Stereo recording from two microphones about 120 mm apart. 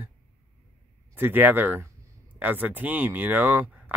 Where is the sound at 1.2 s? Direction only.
15° right (ahead or behind).